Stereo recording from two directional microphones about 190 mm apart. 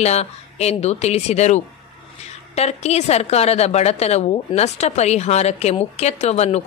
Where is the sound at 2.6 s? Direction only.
35° left (ahead or behind).